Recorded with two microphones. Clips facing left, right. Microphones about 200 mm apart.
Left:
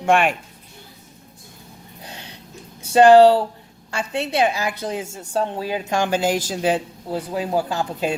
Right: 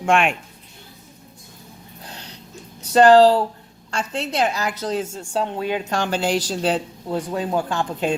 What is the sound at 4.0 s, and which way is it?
Speech, 60° left (ahead or behind).